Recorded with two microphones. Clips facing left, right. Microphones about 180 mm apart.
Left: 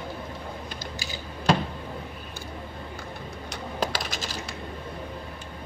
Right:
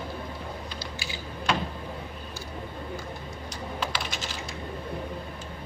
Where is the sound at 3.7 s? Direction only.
40° left (ahead or behind).